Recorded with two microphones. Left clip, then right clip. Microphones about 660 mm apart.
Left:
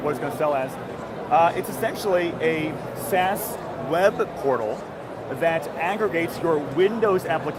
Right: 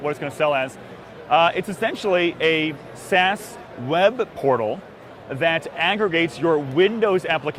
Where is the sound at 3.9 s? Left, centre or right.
Right.